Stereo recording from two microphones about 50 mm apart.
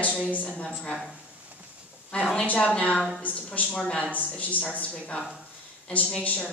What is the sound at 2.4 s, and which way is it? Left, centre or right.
A woman's voice, left.